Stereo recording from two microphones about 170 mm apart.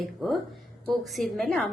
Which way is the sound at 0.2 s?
Centre (ahead or behind).